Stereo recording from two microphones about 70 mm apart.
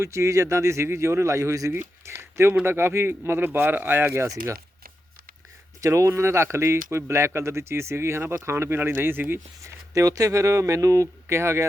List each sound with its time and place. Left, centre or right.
0.0 s speech: right
5.8 s speech: right
9.6 s speech: right